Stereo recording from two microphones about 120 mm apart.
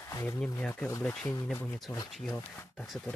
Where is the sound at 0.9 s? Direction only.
25° left (ahead or behind).